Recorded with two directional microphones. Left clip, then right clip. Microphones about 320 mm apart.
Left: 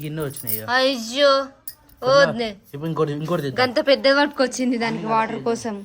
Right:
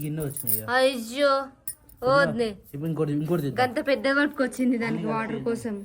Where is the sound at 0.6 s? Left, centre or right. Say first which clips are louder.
Left 3 dB; centre.